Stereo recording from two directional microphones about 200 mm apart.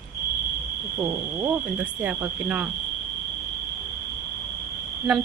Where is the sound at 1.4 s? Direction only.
10° right (ahead or behind).